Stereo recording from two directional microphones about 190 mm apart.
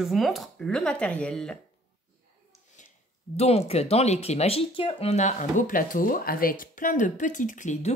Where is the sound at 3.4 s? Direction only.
30° left (ahead or behind).